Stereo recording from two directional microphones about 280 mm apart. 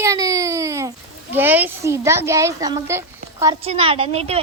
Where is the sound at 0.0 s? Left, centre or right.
Centre.